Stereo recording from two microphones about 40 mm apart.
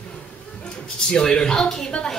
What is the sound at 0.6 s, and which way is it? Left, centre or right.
Speech, left.